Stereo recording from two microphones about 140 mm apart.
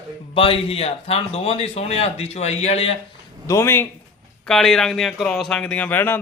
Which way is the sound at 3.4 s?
20° left (ahead or behind).